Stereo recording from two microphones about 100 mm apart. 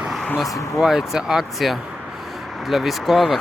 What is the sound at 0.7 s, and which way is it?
Speech, 5° right (ahead or behind).